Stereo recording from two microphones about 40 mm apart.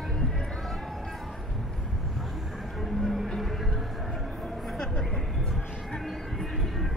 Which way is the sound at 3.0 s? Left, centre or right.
Centre.